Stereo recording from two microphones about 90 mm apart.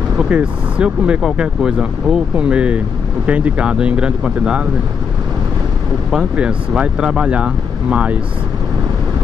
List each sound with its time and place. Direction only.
0.2 s speech: 10° right (ahead or behind)
6.1 s speech: 10° right (ahead or behind)